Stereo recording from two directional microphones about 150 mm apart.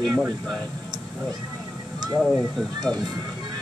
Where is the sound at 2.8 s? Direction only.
30° right (ahead or behind).